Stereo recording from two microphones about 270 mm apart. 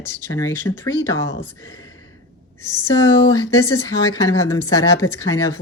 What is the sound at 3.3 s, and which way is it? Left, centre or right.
Speech, centre.